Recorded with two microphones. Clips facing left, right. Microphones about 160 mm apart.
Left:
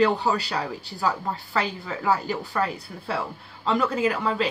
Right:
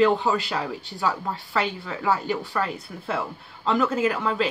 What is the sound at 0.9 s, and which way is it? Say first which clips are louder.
A woman's voice: left 1 dB; centre (ahead or behind).